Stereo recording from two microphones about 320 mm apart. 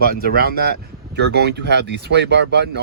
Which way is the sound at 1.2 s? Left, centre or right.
Right.